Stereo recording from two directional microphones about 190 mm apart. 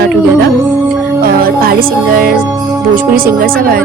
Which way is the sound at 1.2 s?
50° right (ahead or behind).